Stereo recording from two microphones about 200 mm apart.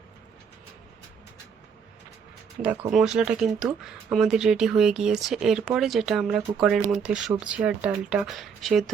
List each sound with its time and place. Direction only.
2.6 s speech: 5° right (ahead or behind)